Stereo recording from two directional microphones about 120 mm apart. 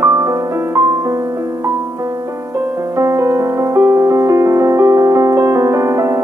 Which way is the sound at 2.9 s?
25° right (ahead or behind).